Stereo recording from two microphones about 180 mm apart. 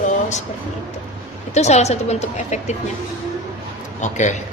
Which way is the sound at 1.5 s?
40° left (ahead or behind).